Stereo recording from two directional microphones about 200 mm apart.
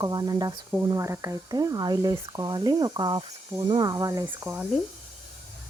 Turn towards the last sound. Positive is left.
turn(degrees=-10)  # may be behind; listen again after turning